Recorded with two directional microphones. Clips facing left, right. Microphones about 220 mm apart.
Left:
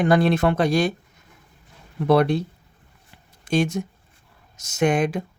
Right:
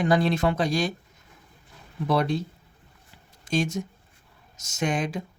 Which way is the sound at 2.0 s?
60° left (ahead or behind).